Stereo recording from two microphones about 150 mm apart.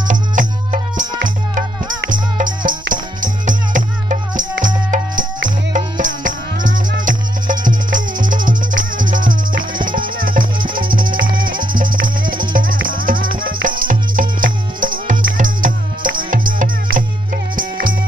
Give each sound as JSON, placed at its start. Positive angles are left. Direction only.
{"t": 0.1, "sound": "music", "side_deg": -60}
{"t": 2.0, "sound": "music", "side_deg": -65}